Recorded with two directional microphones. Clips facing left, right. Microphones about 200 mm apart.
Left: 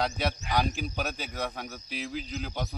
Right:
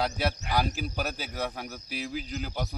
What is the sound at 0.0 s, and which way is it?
A man's voice, 5° right (ahead or behind).